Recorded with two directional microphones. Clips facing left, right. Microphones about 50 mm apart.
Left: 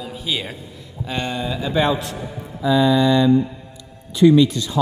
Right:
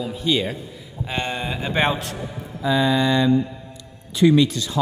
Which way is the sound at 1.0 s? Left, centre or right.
Right.